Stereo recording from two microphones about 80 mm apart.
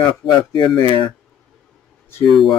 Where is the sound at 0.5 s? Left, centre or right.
Left.